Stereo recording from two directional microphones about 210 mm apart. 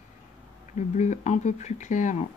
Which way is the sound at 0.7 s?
35° left (ahead or behind).